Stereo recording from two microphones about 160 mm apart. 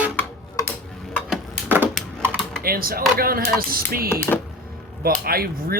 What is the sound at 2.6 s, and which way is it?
Speech, 70° right (ahead or behind).